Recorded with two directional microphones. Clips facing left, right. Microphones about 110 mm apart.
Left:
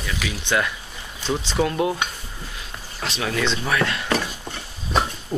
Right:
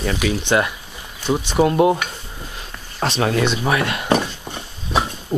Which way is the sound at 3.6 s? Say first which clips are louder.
Right 3 dB; 20° right (ahead or behind).